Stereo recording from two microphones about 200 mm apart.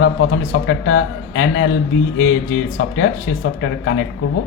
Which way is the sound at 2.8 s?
70° left (ahead or behind).